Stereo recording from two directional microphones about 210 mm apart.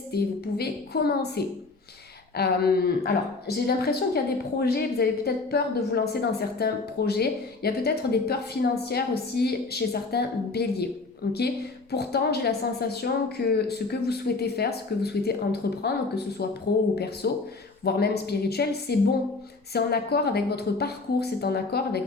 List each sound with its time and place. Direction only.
0.1 s a woman's voice: 50° left (ahead or behind)